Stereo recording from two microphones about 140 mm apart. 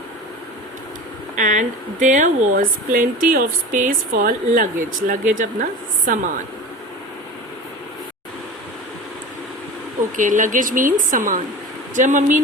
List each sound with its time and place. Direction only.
1.4 s speech: 65° right (ahead or behind)
10.2 s speech: 65° right (ahead or behind)